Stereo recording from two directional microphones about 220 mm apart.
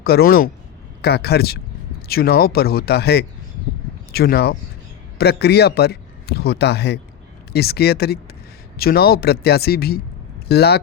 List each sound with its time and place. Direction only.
0.0 s a man's voice: 45° left (ahead or behind)